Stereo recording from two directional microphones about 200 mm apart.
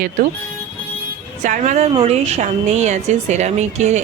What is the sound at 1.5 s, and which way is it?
Speech, 35° right (ahead or behind).